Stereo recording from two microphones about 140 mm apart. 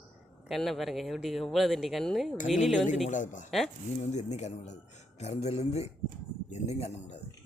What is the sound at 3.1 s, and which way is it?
Speech, 65° left (ahead or behind).